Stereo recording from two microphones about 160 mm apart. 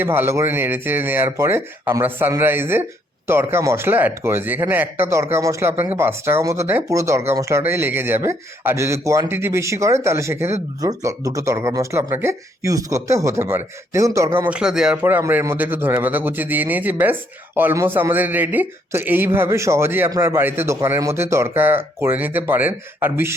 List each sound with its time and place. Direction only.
0.0 s speech: 15° right (ahead or behind)